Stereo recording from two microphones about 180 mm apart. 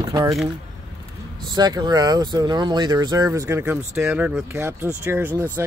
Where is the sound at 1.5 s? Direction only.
25° right (ahead or behind).